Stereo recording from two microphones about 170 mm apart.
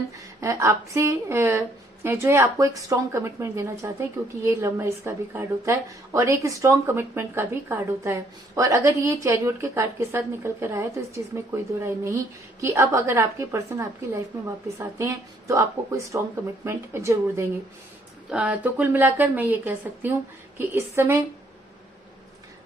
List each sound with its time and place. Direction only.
0.1 s a woman's voice: 20° right (ahead or behind)
18.3 s a woman's voice: 5° right (ahead or behind)